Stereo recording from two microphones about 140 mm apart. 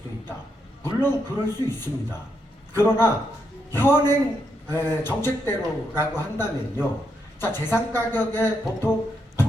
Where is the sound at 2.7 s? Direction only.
20° left (ahead or behind).